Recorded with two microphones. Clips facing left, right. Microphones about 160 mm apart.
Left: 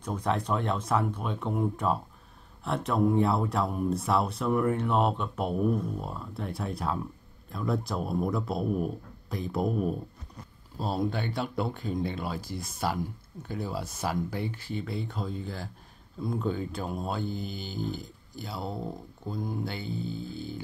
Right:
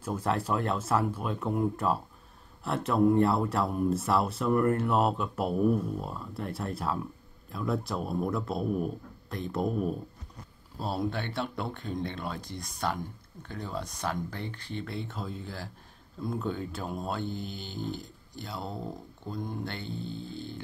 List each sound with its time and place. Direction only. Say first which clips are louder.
0.0 s speech: even; 5° right (ahead or behind)